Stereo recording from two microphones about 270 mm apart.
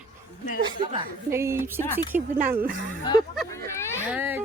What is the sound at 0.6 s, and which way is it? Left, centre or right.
Speech, centre.